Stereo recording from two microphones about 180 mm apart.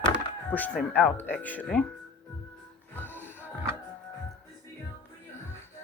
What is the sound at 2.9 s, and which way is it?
Music, 10° left (ahead or behind).